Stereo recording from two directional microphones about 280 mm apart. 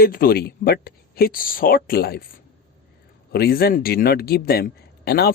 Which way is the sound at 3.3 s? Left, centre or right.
Left.